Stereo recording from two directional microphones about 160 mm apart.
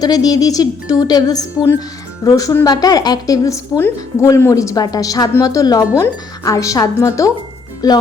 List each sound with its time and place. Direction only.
0.0 s a woman's voice: 25° left (ahead or behind)